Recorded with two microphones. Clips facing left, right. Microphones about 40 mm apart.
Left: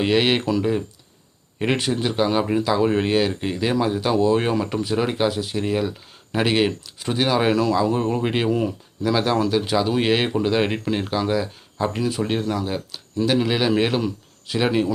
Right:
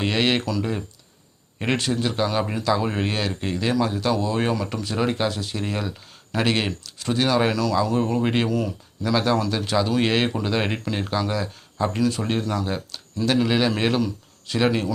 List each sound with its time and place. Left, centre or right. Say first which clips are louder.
0.0 s speech: left 3 dB; centre
7.5 s speech: left 4 dB; left
7.8 s speech: left 1 dB; centre
8.4 s speech: left 3 dB; left
9.0 s speech: left 1 dB; centre